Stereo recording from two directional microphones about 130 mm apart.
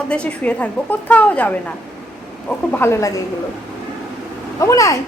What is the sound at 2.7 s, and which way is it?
Speech, 20° left (ahead or behind).